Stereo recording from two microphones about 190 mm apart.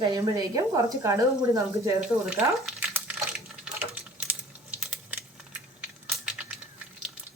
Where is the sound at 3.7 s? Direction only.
10° right (ahead or behind).